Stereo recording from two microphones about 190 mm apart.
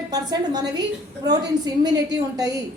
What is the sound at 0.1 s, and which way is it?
A woman's voice, 20° right (ahead or behind).